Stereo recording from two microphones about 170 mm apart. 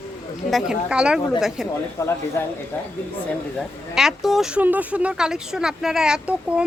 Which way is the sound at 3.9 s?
Centre (ahead or behind).